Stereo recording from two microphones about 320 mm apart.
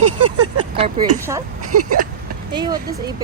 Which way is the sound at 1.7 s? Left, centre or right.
Right.